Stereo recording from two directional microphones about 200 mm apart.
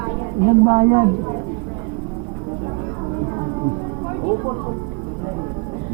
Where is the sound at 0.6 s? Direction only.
25° right (ahead or behind).